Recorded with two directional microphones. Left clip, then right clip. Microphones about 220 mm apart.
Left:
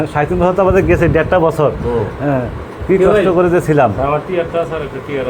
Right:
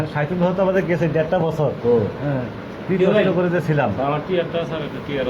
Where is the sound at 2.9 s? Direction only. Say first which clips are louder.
Left 7 dB; 50° left (ahead or behind).